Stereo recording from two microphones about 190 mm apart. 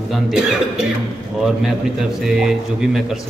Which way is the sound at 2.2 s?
Centre (ahead or behind).